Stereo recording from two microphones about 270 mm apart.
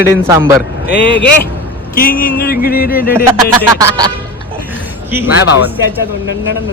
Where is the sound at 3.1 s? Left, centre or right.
Centre.